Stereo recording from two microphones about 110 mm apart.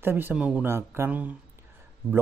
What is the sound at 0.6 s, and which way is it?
Speech, 20° right (ahead or behind).